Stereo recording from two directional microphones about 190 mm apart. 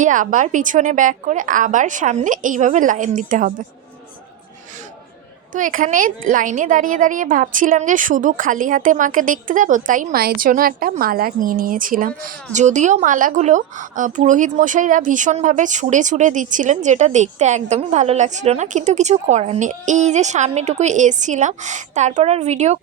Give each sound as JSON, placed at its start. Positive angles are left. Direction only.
{"t": 0.0, "sound": "a woman's voice", "side_deg": -45}
{"t": 5.5, "sound": "a woman's voice", "side_deg": -45}